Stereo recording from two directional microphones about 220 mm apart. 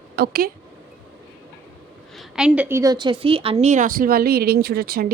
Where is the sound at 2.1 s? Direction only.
5° right (ahead or behind).